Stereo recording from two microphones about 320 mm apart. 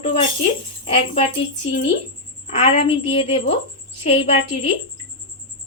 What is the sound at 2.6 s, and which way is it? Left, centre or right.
A woman's voice, centre.